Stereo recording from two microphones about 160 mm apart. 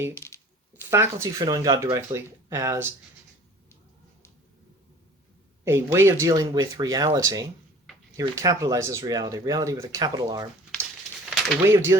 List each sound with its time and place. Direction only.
0.1 s speech: 15° left (ahead or behind)
0.9 s speech: 15° right (ahead or behind)
5.6 s speech: 15° right (ahead or behind)
11.3 s a sound: centre (ahead or behind)
11.6 s speech: 15° right (ahead or behind)